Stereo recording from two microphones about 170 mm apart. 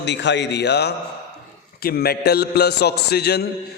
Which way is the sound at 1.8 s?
65° left (ahead or behind).